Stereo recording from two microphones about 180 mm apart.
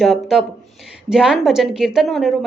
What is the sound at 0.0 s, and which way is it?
A woman's voice, centre (ahead or behind).